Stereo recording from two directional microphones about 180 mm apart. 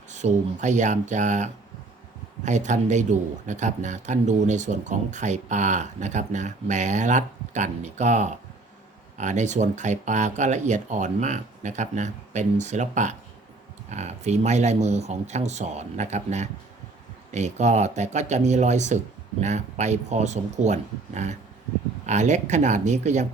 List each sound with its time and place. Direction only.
0.1 s speech: 40° right (ahead or behind)